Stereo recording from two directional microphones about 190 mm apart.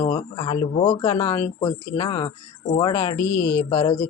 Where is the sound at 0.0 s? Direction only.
25° left (ahead or behind).